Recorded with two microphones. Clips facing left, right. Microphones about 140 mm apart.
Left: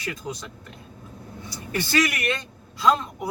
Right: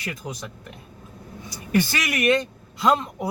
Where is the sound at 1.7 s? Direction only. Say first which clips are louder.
Right 1 dB; 15° right (ahead or behind).